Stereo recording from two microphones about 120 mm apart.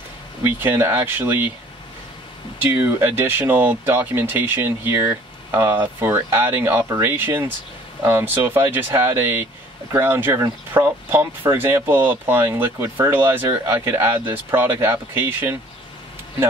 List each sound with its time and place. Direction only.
0.4 s speech: 15° right (ahead or behind)
2.7 s speech: 20° right (ahead or behind)